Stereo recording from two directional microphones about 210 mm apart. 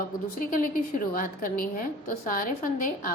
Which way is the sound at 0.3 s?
40° left (ahead or behind).